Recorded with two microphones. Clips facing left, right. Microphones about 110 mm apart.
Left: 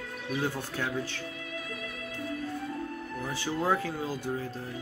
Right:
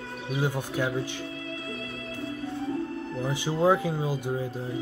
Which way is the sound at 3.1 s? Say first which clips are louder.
Right 3 dB; 20° right (ahead or behind).